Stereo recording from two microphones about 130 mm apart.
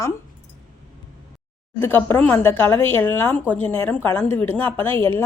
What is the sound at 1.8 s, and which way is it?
Speech, 15° left (ahead or behind).